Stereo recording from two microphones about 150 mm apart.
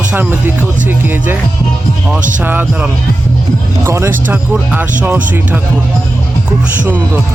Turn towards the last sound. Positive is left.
turn(degrees=-10)  # may be behind; listen again after turning